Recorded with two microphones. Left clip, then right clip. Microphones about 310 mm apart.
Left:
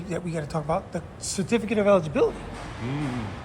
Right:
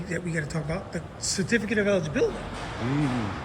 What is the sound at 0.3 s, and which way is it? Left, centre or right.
Speech, left.